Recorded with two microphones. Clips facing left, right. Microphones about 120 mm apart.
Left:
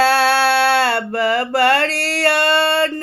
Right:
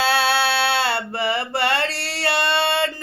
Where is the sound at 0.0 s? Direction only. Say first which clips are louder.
Left 5 dB; 40° left (ahead or behind).